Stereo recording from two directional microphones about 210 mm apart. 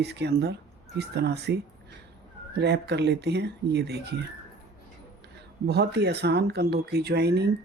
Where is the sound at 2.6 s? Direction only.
55° right (ahead or behind).